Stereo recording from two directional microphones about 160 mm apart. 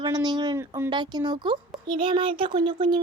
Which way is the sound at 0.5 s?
15° right (ahead or behind).